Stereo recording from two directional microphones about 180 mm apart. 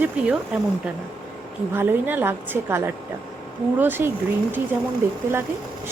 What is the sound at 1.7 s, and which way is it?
A woman's voice, 10° right (ahead or behind).